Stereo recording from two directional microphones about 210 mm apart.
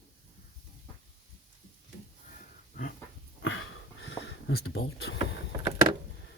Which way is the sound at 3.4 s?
70° left (ahead or behind).